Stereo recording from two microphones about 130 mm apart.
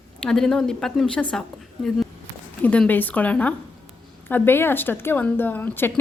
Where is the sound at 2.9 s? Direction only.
15° left (ahead or behind).